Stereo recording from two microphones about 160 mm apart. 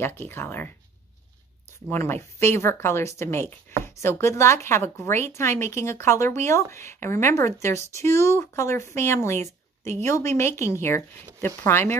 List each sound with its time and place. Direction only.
0.0 s speech: 15° left (ahead or behind)
1.9 s speech: 15° left (ahead or behind)